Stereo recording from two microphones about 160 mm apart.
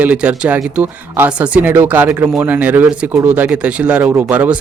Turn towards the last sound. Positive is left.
turn(degrees=-10)  # may be behind; listen again after turning